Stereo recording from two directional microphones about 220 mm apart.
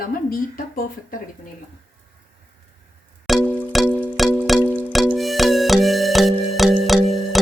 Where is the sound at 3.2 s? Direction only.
Centre (ahead or behind).